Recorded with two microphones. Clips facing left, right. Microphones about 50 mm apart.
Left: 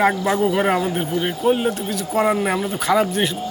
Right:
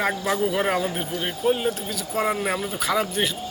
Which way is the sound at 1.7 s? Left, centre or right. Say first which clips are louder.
Left 6 dB; centre.